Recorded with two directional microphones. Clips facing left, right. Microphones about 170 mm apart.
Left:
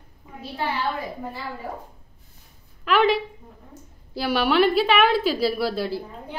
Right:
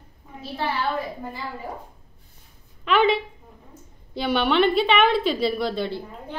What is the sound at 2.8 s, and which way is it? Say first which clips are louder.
A woman's voice: even; centre (ahead or behind).